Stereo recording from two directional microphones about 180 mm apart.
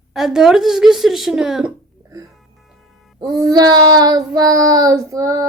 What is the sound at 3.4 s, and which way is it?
Child singing, 20° right (ahead or behind).